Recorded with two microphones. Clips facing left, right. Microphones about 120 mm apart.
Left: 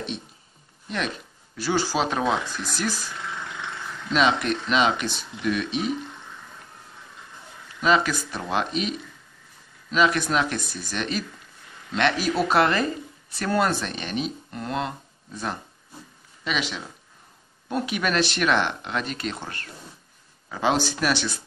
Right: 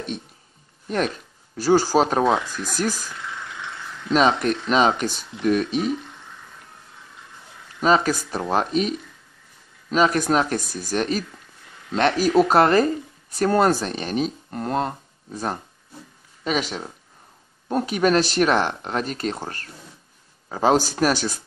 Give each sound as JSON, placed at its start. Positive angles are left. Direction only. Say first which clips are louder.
{"t": 0.8, "sound": "speech", "louder": "right 6 dB", "side_deg": -45}
{"t": 4.1, "sound": "speech", "louder": "right 3 dB", "side_deg": -40}
{"t": 7.8, "sound": "speech", "louder": "right 3 dB", "side_deg": -40}